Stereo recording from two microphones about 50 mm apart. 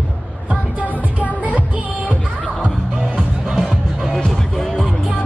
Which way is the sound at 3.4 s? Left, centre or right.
Centre.